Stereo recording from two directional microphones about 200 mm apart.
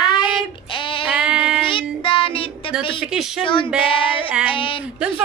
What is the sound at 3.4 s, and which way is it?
Music, 25° left (ahead or behind).